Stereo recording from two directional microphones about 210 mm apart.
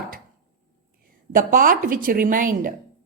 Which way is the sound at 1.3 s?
40° right (ahead or behind).